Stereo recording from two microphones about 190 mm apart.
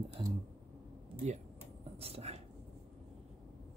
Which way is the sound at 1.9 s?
30° right (ahead or behind).